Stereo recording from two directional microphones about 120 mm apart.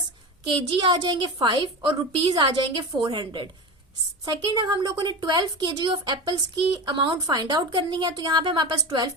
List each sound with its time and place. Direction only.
0.4 s a woman's voice: 40° right (ahead or behind)